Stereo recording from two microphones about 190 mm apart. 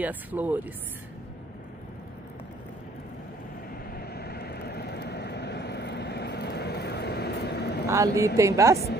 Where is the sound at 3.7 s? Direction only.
50° left (ahead or behind).